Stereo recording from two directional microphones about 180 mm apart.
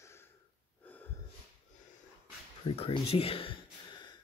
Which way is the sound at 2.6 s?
30° left (ahead or behind).